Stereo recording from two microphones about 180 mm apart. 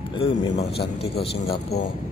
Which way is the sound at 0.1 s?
30° left (ahead or behind).